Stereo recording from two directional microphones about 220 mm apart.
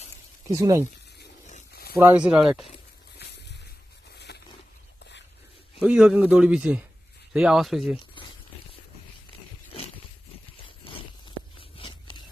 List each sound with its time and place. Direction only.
0.6 s speech: 15° right (ahead or behind)
1.2 s a sound: 40° left (ahead or behind)
2.0 s a man's voice: 5° right (ahead or behind)
4.1 s roaring cats: 50° left (ahead or behind)
5.8 s a man's voice: 5° right (ahead or behind)
11.8 s scrape: 20° left (ahead or behind)